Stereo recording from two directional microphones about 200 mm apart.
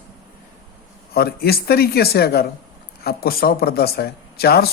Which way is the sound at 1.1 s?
50° left (ahead or behind).